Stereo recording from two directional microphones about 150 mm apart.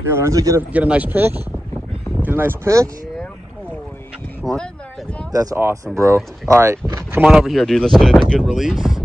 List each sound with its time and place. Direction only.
0.1 s speech: 20° right (ahead or behind)
0.7 s speech: 10° right (ahead or behind)
4.4 s speech: centre (ahead or behind)
5.3 s speech: 25° right (ahead or behind)
7.2 s speech: 5° right (ahead or behind)